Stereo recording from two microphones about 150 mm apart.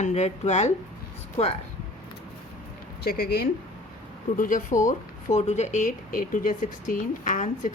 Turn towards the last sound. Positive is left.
turn(degrees=60)  # may be behind; listen again after turning